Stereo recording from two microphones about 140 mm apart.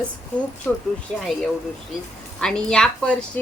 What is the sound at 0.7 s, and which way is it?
A woman's voice, 10° left (ahead or behind).